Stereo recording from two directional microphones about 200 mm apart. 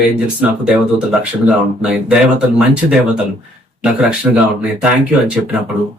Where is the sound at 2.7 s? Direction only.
5° right (ahead or behind).